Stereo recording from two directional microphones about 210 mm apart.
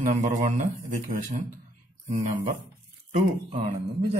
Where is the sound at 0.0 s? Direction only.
35° right (ahead or behind).